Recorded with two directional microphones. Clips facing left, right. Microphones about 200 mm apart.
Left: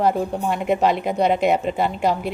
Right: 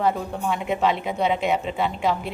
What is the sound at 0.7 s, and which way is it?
A woman's voice, 40° left (ahead or behind).